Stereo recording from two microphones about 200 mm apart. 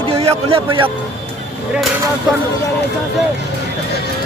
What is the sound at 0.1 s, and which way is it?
Speech, 30° right (ahead or behind).